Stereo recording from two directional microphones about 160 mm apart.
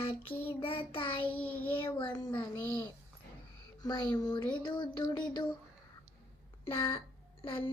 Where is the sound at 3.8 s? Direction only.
25° left (ahead or behind).